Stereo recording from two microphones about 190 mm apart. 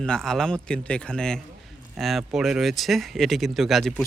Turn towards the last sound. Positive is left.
turn(degrees=0)  # may be behind; listen again after turning